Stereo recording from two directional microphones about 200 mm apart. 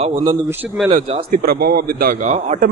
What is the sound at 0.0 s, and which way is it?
Speech, 35° right (ahead or behind).